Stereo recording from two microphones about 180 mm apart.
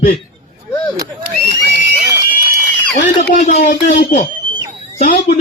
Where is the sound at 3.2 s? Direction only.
40° left (ahead or behind).